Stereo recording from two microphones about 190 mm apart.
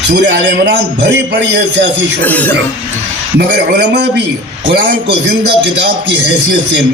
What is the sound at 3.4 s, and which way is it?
Speech, 60° right (ahead or behind).